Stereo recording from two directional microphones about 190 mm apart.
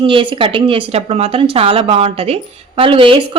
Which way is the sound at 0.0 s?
25° right (ahead or behind).